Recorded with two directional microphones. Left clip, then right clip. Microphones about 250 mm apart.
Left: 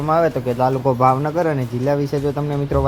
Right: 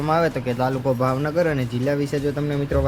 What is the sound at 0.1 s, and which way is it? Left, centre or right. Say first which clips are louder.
Speech: left 4 dB; centre.